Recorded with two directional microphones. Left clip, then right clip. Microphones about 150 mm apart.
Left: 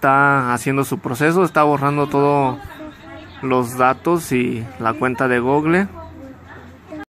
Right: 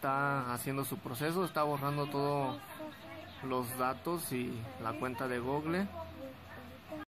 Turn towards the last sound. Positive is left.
turn(degrees=40)  # may be behind; listen again after turning